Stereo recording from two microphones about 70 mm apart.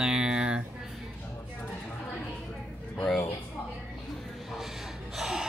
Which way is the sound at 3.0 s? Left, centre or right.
Centre.